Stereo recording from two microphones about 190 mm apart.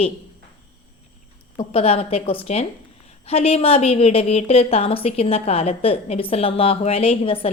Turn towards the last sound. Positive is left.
turn(degrees=30)  # may be behind; listen again after turning